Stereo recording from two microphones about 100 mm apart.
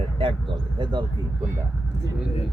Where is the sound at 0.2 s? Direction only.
60° right (ahead or behind).